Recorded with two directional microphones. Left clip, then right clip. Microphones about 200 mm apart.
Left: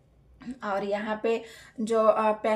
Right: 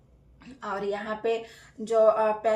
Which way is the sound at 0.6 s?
45° left (ahead or behind).